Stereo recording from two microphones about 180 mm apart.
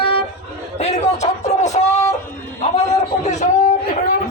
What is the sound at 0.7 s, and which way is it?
A man's voice, 35° left (ahead or behind).